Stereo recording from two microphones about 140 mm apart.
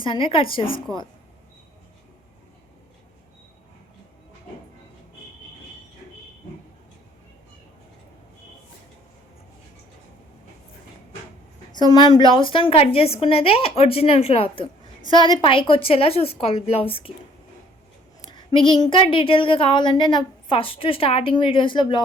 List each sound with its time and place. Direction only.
0.0 s a woman's voice: 40° left (ahead or behind)
11.7 s a woman's voice: 30° left (ahead or behind)
18.3 s a woman's voice: 35° left (ahead or behind)